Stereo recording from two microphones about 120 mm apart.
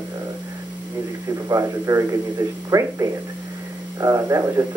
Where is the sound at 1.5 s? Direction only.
25° right (ahead or behind).